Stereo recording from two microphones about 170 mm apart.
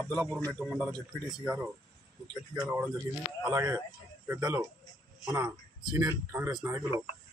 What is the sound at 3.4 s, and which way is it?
Speech, 15° right (ahead or behind).